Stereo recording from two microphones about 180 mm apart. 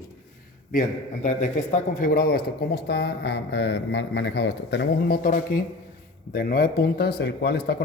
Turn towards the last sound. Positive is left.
turn(degrees=65)  # may be behind; listen again after turning